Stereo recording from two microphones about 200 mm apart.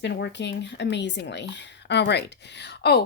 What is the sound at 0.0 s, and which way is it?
Speech, 60° left (ahead or behind).